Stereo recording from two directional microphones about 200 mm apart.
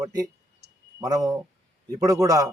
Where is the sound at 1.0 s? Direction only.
20° right (ahead or behind).